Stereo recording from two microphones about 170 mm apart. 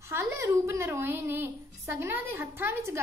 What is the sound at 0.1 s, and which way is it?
A woman's voice, 15° right (ahead or behind).